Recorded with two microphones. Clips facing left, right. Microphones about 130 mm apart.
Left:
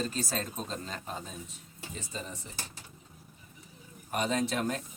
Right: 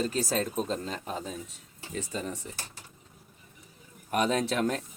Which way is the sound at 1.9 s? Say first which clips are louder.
Right 7 dB; 65° right (ahead or behind).